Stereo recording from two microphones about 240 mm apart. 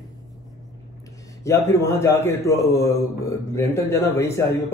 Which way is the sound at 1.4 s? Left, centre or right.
Centre.